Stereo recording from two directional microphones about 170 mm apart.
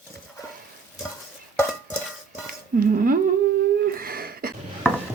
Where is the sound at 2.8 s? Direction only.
55° right (ahead or behind).